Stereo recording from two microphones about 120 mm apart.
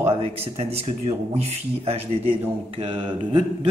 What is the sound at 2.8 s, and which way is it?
Speech, 45° right (ahead or behind).